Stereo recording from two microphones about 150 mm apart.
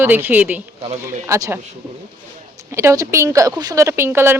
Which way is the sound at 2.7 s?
20° right (ahead or behind).